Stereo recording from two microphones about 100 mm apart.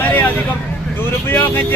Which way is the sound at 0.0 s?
20° left (ahead or behind).